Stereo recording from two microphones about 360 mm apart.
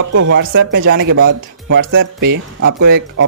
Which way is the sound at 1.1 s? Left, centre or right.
Right.